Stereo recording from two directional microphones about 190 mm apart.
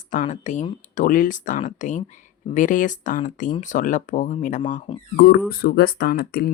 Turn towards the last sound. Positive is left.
turn(degrees=55)  # may be behind; listen again after turning